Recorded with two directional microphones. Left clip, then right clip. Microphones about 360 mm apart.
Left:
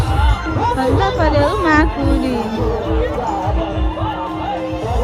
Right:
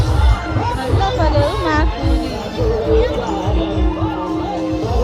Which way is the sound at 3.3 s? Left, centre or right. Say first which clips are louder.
Left 1 dB; left.